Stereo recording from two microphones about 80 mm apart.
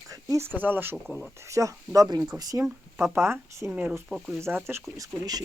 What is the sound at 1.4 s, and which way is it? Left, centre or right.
Speech, right.